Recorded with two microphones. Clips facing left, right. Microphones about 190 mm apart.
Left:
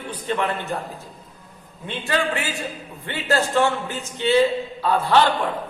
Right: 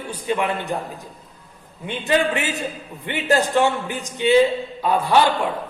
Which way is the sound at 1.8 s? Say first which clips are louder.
Right 4 dB; 20° right (ahead or behind).